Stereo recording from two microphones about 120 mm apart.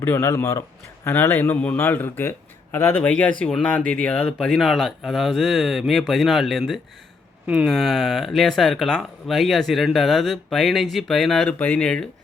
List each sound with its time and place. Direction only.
0.0 s speech: 20° left (ahead or behind)